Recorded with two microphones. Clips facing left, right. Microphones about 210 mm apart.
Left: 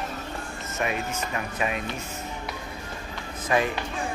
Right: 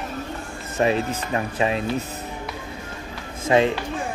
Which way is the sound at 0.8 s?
30° right (ahead or behind).